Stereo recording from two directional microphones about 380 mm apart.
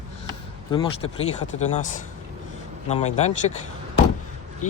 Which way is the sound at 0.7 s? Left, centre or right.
Centre.